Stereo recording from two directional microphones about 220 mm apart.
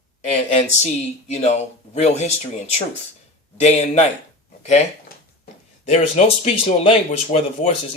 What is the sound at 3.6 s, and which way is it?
Speech, 30° left (ahead or behind).